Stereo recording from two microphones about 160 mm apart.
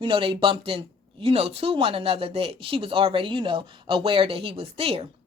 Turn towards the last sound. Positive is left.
turn(degrees=-40)  # may be behind; listen again after turning